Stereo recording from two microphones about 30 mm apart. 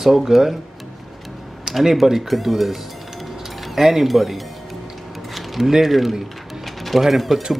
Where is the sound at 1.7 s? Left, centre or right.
Right.